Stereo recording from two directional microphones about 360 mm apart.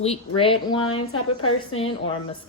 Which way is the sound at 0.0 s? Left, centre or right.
Centre.